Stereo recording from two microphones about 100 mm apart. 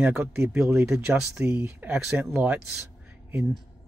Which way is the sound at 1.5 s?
25° right (ahead or behind).